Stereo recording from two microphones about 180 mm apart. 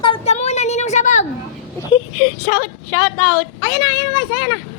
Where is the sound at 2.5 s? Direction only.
35° left (ahead or behind).